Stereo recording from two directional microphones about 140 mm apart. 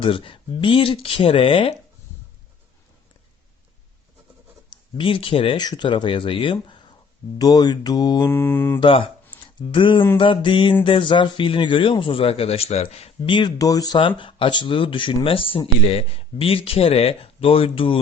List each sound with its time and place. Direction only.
0.0 s speech: 40° left (ahead or behind)
4.7 s speech: 40° left (ahead or behind)
7.3 s mantra: 30° left (ahead or behind)
8.3 s mantra: 15° left (ahead or behind)
8.8 s speech: 40° left (ahead or behind)
13.6 s mantra: 25° left (ahead or behind)
14.2 s speech: 40° left (ahead or behind)